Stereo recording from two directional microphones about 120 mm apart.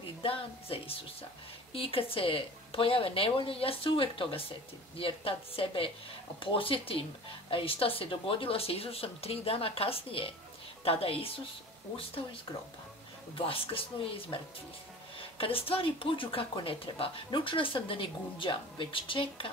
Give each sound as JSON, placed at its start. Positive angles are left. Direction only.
{"t": 0.2, "sound": "speech", "side_deg": 50}
{"t": 13.5, "sound": "speech", "side_deg": 50}